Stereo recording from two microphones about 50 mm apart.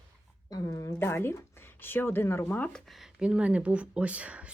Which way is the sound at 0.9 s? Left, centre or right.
Left.